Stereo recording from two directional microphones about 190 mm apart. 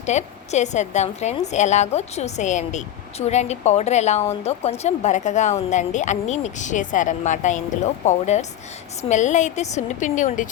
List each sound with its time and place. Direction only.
0.0 s a woman's voice: 35° left (ahead or behind)